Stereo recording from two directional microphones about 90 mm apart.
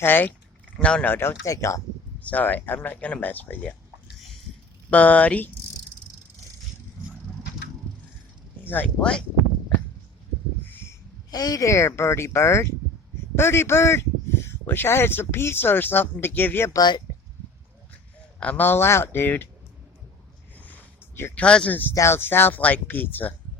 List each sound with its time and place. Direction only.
0.0 s speech: 20° left (ahead or behind)
0.8 s speech: 10° left (ahead or behind)
1.1 s speech: 25° left (ahead or behind)
1.5 s speech: 35° left (ahead or behind)
2.2 s speech: 20° left (ahead or behind)
4.9 s speech: 15° left (ahead or behind)
8.6 s speech: 20° left (ahead or behind)
9.0 s speech: 10° left (ahead or behind)
11.3 s speech: 45° left (ahead or behind); by 16.7 s 25° left (ahead or behind)
16.7 s speech: 55° left (ahead or behind)
17.9 s speech: 15° left (ahead or behind)
20.6 s a sound: 20° left (ahead or behind)
21.3 s speech: 15° left (ahead or behind)